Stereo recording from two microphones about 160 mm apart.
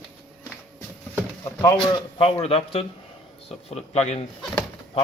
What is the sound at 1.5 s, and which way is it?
A man's voice, 25° left (ahead or behind).